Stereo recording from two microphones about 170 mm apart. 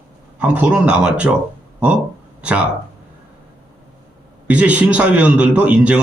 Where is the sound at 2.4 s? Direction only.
5° right (ahead or behind).